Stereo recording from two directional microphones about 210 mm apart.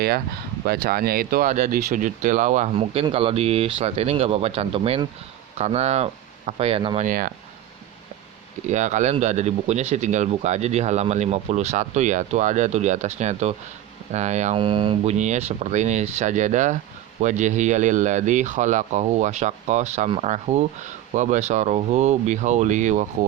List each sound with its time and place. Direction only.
0.6 s speech: 45° right (ahead or behind); by 7.1 s 25° right (ahead or behind)
7.1 s speech: 40° right (ahead or behind)
8.7 s speech: 35° right (ahead or behind)